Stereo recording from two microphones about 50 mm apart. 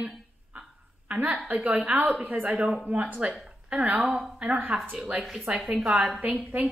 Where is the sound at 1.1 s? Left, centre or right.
Right.